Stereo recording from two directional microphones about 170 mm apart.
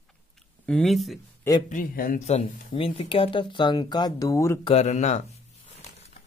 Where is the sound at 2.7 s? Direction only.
30° left (ahead or behind).